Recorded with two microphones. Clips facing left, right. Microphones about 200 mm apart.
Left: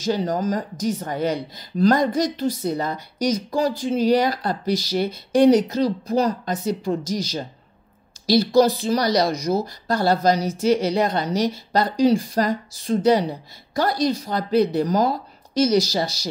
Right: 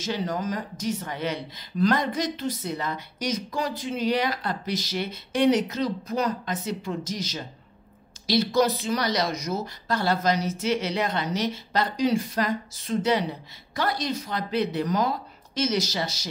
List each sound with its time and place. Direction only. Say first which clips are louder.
0.0 s a woman's voice: left 6 dB; 35° left (ahead or behind)